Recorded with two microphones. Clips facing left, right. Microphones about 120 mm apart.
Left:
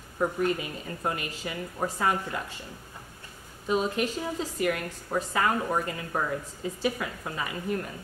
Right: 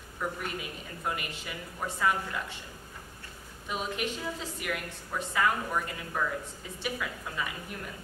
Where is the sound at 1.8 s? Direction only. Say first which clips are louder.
Left 5 dB; 40° left (ahead or behind).